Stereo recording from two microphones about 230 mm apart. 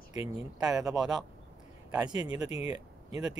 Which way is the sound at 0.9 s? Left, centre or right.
Centre.